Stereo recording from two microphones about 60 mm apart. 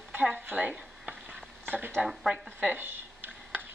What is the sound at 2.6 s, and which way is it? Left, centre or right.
Speech, right.